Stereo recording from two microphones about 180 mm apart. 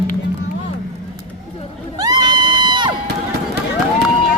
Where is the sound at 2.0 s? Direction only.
25° right (ahead or behind).